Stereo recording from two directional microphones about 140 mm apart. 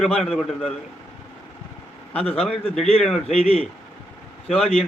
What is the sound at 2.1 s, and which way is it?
Speech, 45° left (ahead or behind).